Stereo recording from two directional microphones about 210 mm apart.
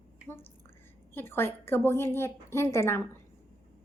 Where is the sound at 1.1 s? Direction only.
10° left (ahead or behind).